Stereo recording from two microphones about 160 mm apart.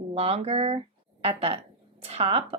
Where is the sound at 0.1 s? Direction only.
40° right (ahead or behind).